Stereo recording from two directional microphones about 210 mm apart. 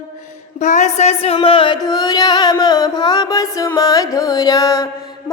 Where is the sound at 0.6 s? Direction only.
35° left (ahead or behind); by 4.8 s 15° left (ahead or behind).